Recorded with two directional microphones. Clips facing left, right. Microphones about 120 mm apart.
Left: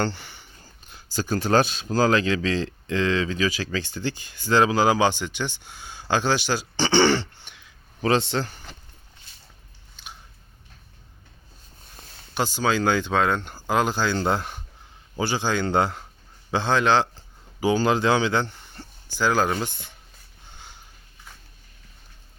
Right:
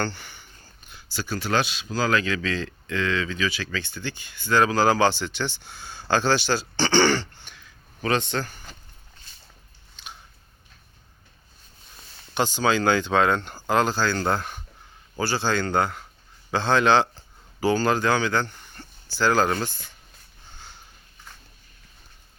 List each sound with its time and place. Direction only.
0.0 s speech: 25° left (ahead or behind)
0.9 s speech: 40° left (ahead or behind)
4.6 s speech: 15° left (ahead or behind)
9.9 s biting: 5° left (ahead or behind)
12.3 s speech: 5° left (ahead or behind)
15.7 s speech: 25° left (ahead or behind)
16.5 s speech: 15° left (ahead or behind)
17.6 s speech: 15° left (ahead or behind)
19.3 s speech: 5° left (ahead or behind)